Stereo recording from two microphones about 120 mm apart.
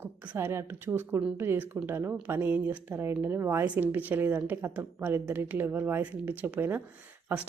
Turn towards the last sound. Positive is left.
turn(degrees=-15)  # may be behind; listen again after turning